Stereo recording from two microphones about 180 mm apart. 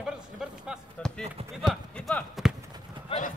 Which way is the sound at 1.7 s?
5° left (ahead or behind).